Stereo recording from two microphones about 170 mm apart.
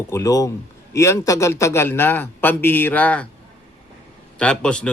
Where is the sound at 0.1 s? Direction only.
20° left (ahead or behind).